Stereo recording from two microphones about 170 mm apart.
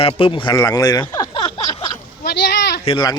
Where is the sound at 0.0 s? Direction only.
35° left (ahead or behind).